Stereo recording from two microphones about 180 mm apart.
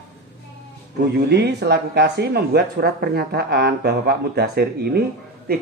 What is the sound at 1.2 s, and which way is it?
Speech, 65° right (ahead or behind).